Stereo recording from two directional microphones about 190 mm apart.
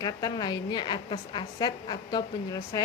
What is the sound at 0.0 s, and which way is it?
A woman's voice, 20° left (ahead or behind).